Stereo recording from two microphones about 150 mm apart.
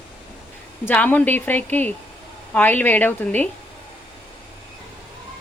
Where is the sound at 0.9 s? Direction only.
10° left (ahead or behind).